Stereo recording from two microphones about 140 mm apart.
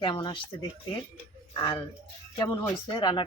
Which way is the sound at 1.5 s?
30° left (ahead or behind).